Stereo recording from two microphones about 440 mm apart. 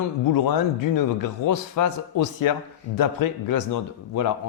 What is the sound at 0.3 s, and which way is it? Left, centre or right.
A man's voice, left.